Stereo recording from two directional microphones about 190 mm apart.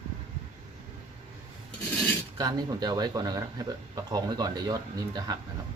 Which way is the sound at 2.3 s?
20° right (ahead or behind).